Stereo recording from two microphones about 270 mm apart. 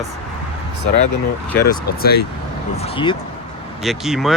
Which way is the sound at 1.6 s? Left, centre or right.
Left.